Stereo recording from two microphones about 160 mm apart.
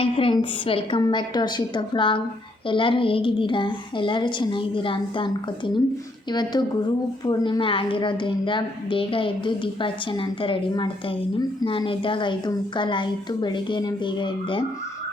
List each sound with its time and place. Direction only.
0.0 s a woman's voice: 35° left (ahead or behind)